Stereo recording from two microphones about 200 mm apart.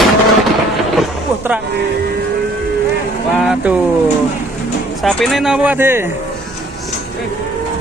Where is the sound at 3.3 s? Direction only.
5° right (ahead or behind).